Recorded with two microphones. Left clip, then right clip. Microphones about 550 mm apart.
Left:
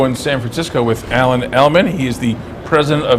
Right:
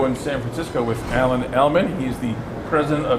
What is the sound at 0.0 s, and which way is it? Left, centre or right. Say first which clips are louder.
A man's voice: left 6 dB; left.